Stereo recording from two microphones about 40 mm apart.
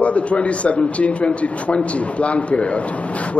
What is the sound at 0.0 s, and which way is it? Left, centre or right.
Speech, left.